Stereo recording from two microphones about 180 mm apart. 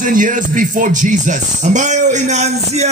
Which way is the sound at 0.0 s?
45° right (ahead or behind).